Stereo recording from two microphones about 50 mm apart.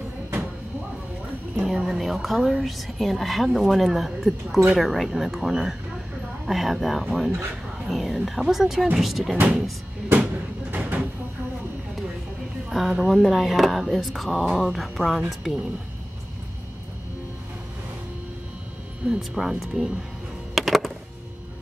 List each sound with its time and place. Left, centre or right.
1.8 s speech: centre
10.0 s a sound: right
12.6 s a sound: centre
13.0 s speech: centre
19.0 s speech: centre
20.5 s music: centre